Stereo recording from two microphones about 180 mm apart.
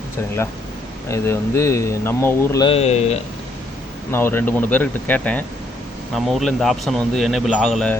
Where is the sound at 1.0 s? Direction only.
15° left (ahead or behind).